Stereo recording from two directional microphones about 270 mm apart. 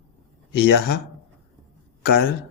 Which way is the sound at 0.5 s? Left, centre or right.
Left.